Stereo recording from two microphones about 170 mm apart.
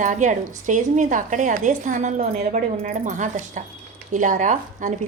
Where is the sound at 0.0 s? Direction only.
45° right (ahead or behind).